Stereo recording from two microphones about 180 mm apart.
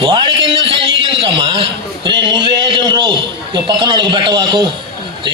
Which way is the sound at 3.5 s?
25° right (ahead or behind).